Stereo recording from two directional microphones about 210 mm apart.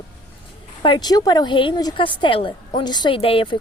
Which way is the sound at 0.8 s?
20° left (ahead or behind).